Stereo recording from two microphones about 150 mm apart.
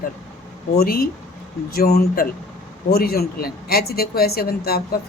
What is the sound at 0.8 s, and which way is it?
Speech, 80° left.